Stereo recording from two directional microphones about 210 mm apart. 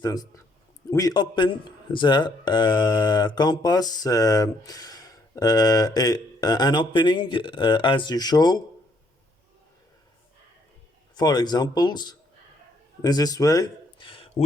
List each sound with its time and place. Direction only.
0.0 s speech: 20° left (ahead or behind)
11.1 s speech: 20° left (ahead or behind)